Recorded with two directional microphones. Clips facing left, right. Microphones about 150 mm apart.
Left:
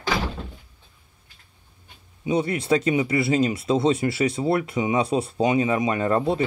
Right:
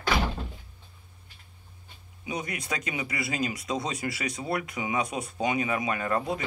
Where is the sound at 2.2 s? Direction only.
30° left (ahead or behind).